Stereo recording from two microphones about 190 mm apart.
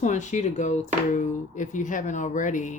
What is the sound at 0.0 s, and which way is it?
Speech, 40° left (ahead or behind).